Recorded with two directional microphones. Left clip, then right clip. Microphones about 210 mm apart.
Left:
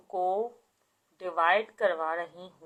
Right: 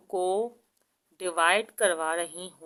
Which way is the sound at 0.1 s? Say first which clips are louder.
Right 1 dB; 60° right (ahead or behind).